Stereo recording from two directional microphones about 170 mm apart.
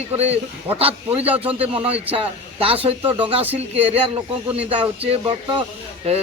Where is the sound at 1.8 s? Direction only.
35° right (ahead or behind).